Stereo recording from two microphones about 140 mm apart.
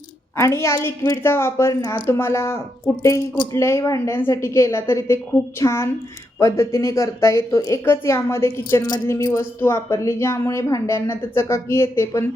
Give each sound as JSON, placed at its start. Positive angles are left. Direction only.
{"t": 0.3, "sound": "a woman's voice", "side_deg": 20}